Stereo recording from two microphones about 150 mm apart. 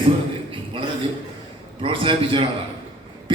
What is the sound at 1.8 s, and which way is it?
Speech, 35° right (ahead or behind).